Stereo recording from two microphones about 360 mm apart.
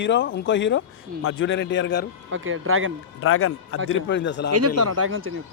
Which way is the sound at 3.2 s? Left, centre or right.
Left.